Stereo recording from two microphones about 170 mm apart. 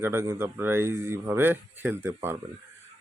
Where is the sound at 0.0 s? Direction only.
15° right (ahead or behind).